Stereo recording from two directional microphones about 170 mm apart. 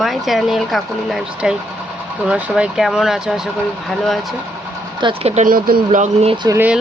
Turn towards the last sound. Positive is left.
turn(degrees=-10)  # may be behind; listen again after turning